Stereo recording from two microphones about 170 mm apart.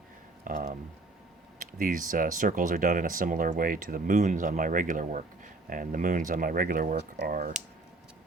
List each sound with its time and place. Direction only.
0.4 s a sound: 50° right (ahead or behind)
1.5 s speech: 50° right (ahead or behind); by 7.3 s 80° right
7.3 s speech: 55° right (ahead or behind)